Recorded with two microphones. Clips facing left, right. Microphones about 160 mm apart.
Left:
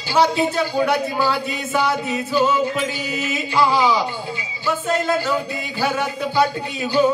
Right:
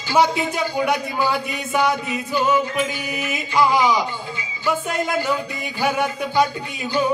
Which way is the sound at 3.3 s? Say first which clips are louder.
Even; 15° right (ahead or behind).